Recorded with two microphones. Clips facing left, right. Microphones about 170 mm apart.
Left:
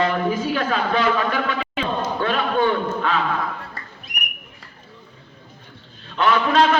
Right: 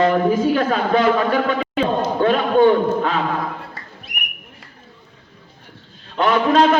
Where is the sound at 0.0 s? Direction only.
40° right (ahead or behind).